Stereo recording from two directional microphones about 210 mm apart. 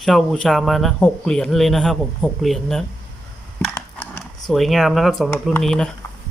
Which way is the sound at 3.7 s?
10° left (ahead or behind).